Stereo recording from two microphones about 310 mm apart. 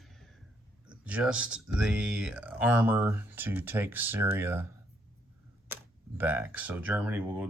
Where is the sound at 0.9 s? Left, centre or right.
Centre.